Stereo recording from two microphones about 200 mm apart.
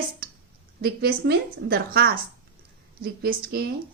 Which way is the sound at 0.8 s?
50° right (ahead or behind).